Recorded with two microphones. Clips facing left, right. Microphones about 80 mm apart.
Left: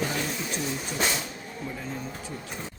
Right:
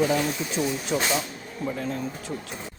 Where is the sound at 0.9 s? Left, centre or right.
Right.